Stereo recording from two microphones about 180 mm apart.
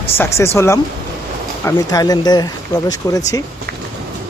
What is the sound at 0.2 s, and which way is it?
Speech, 15° left (ahead or behind).